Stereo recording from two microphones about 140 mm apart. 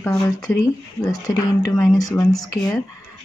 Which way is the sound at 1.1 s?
25° left (ahead or behind).